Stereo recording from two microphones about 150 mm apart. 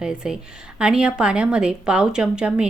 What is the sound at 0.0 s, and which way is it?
A woman's voice, 5° right (ahead or behind).